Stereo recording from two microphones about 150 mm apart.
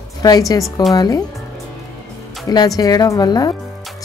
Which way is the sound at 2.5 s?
20° left (ahead or behind).